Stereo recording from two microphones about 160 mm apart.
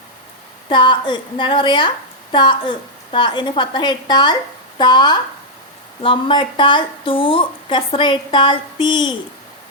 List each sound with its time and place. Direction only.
0.7 s a woman's voice: 30° left (ahead or behind)